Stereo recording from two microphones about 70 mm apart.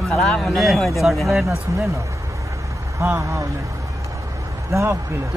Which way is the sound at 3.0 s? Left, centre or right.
Right.